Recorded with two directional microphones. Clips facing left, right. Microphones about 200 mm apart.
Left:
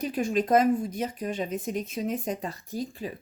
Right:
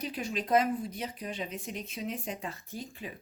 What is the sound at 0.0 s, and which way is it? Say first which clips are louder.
Speech: left 8 dB; 50° left (ahead or behind).